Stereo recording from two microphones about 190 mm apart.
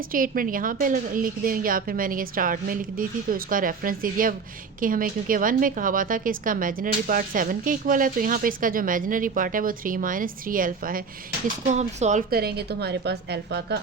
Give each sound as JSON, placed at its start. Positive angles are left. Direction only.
{"t": 0.1, "sound": "a woman's voice", "side_deg": -45}
{"t": 11.7, "sound": "speech", "side_deg": -35}
{"t": 12.3, "sound": "a woman's voice", "side_deg": -55}